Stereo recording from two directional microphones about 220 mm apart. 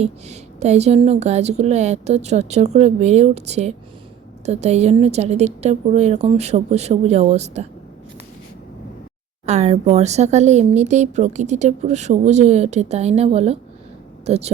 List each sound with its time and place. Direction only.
0.0 s speech: 30° right (ahead or behind)
9.5 s speech: 30° right (ahead or behind)